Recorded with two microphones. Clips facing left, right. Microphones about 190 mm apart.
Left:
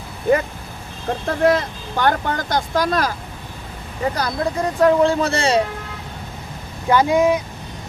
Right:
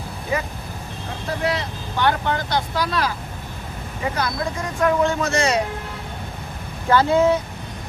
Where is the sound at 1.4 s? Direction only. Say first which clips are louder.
Left 9 dB; 50° left (ahead or behind); by 5.6 s 30° left (ahead or behind).